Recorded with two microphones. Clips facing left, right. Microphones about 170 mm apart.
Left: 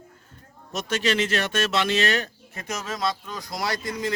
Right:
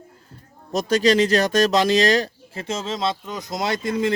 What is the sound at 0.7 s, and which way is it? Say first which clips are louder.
Speech: right 7 dB; 35° right (ahead or behind).